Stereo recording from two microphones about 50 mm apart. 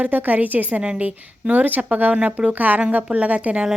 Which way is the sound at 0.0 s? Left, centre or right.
Right.